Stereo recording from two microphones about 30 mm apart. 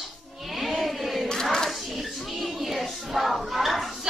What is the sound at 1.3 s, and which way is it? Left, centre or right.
Hands, left.